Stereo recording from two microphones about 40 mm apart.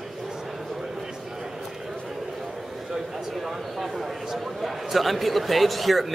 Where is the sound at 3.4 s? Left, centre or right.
Centre.